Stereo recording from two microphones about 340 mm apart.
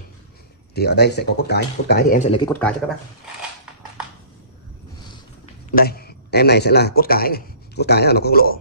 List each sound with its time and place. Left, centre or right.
0.7 s speech: left; by 2.7 s centre
5.8 s speech: left